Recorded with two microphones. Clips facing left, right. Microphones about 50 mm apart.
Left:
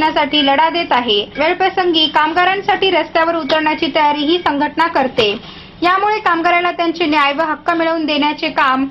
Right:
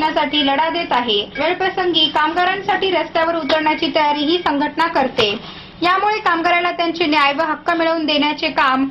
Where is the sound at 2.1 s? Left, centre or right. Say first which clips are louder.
Left 3 dB; left.